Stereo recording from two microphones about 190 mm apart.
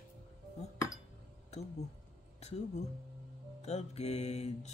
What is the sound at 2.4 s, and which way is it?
Mantra, 35° left (ahead or behind).